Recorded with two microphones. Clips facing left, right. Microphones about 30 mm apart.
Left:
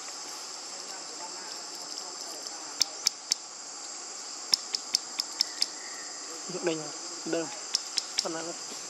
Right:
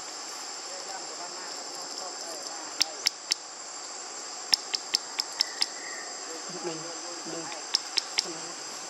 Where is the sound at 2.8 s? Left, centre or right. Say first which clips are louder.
Right 1 dB; right.